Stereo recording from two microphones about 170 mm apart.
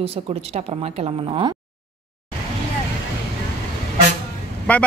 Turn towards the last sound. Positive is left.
turn(degrees=10)  # may be behind; listen again after turning